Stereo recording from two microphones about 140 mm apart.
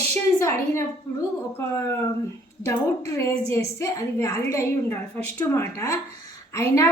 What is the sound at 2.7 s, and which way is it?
A woman's voice, 20° left (ahead or behind).